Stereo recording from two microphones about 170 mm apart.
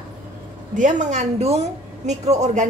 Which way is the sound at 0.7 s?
45° right (ahead or behind).